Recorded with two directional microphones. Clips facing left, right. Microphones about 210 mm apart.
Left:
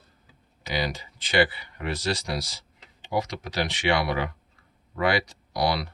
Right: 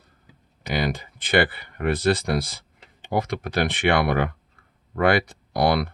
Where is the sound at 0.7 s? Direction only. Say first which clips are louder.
Right 4 dB; 55° right (ahead or behind).